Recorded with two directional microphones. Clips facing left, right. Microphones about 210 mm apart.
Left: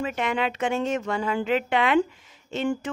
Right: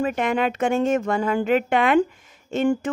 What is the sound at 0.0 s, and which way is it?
Speech, 45° right (ahead or behind).